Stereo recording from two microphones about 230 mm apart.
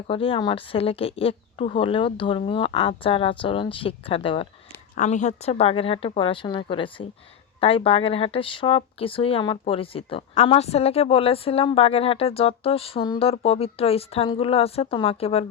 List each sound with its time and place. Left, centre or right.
0.1 s speech: left